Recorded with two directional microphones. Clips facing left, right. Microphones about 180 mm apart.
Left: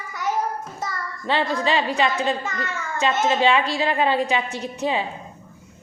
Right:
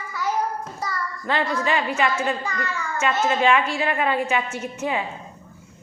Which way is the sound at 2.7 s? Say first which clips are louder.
Left 2 dB; 35° left (ahead or behind).